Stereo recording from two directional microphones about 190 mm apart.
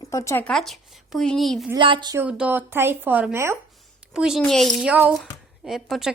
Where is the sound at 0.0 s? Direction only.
15° left (ahead or behind); by 1.7 s centre (ahead or behind).